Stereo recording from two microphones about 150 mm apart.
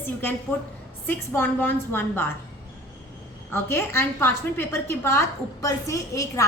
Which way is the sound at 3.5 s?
15° left (ahead or behind).